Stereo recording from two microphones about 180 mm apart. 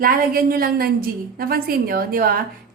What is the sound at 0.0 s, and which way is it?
A woman's voice, 55° right (ahead or behind).